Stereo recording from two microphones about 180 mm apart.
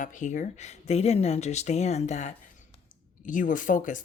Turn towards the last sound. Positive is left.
turn(degrees=45)  # may be behind; listen again after turning